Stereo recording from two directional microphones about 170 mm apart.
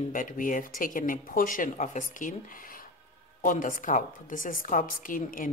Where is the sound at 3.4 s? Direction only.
50° left (ahead or behind).